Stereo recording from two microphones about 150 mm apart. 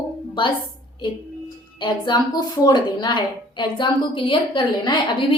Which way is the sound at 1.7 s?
30° left (ahead or behind).